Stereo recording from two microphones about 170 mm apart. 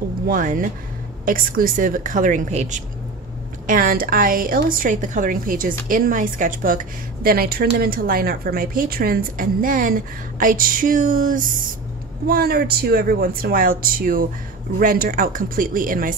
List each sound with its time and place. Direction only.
0.3 s speech: 50° right (ahead or behind)
3.6 s a woman's voice: 55° right (ahead or behind)
12.3 s a woman's voice: 65° right (ahead or behind)